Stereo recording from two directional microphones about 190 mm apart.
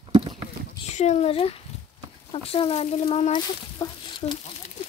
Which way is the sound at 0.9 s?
35° left (ahead or behind).